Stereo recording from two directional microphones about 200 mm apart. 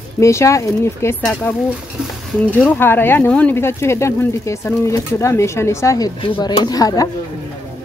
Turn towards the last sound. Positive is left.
turn(degrees=20)  # may be behind; listen again after turning